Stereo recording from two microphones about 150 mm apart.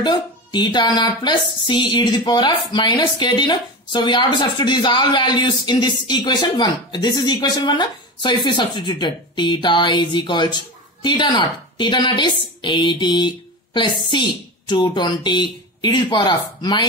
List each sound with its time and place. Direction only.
0.0 s a woman's voice: 30° left (ahead or behind)